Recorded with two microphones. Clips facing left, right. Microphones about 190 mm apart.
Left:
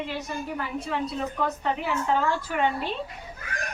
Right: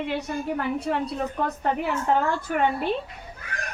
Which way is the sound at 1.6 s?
50° right (ahead or behind).